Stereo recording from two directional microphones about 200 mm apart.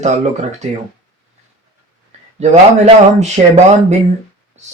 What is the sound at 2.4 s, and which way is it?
Speech, 35° right (ahead or behind).